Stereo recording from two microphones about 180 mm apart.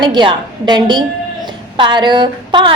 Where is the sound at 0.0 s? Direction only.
25° right (ahead or behind).